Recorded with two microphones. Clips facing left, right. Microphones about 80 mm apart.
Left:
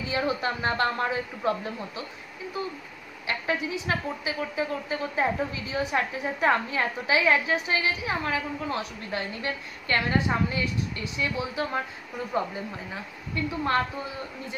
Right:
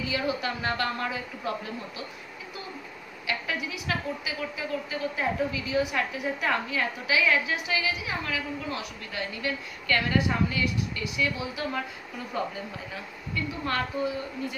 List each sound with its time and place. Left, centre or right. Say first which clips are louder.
0.1 s a woman's voice: left 4 dB; left
3.3 s a woman's voice: left 3 dB; left